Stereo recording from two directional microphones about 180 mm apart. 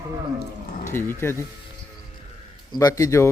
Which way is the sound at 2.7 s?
20° left (ahead or behind).